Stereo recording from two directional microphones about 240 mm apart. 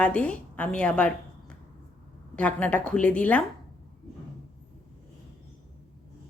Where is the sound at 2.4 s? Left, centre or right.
Centre.